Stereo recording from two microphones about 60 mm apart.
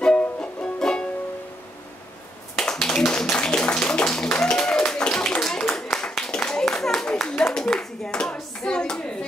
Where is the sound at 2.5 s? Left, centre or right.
Centre.